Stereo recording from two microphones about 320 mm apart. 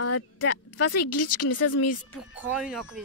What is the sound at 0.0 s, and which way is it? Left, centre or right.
Speech, left.